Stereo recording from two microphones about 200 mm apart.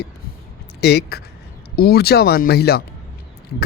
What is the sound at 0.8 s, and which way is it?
Speech, 55° left (ahead or behind).